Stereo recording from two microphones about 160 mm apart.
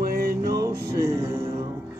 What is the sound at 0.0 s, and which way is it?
Music, 75° right (ahead or behind).